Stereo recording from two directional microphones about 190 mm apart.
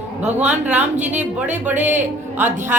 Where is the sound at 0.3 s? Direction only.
10° right (ahead or behind).